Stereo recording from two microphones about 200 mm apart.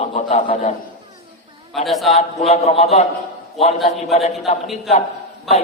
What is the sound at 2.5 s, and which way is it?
Speech, 30° left (ahead or behind).